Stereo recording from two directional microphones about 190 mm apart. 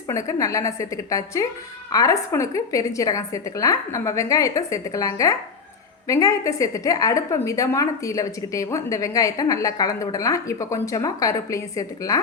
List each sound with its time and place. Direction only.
0.1 s a woman's voice: 15° left (ahead or behind)